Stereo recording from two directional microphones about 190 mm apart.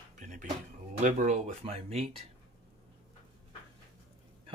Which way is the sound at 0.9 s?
40° right (ahead or behind).